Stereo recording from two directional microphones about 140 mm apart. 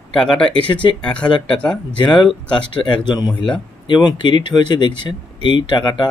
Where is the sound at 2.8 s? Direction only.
35° left (ahead or behind).